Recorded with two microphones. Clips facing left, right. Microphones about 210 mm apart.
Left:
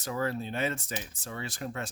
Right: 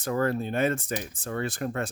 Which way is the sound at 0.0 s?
50° right (ahead or behind).